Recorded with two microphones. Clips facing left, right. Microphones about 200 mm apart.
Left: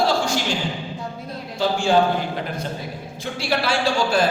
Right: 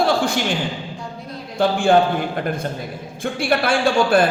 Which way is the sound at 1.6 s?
55° right (ahead or behind).